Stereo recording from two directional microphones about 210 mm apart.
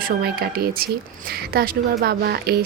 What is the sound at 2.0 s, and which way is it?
Speech, 50° right (ahead or behind).